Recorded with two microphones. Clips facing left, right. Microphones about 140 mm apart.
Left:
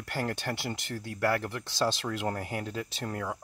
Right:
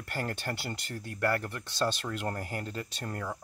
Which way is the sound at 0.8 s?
85° left.